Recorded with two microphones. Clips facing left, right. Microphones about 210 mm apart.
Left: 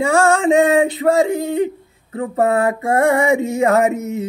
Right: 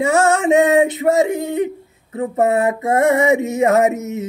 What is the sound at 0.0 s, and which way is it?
Male singing, 20° right (ahead or behind).